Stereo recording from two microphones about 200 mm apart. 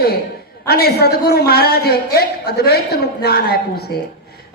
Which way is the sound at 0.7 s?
50° left (ahead or behind).